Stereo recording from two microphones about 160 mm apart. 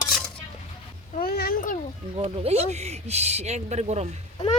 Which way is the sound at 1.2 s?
75° left (ahead or behind).